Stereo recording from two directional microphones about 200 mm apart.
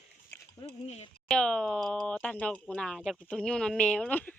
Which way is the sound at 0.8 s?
30° left (ahead or behind).